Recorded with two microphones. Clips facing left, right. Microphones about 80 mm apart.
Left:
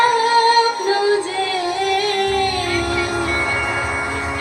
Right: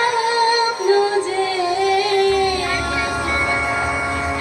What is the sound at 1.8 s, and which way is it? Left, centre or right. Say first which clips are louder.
Music: right 3 dB; left.